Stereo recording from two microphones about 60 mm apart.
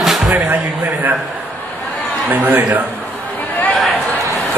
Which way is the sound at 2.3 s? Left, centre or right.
Right.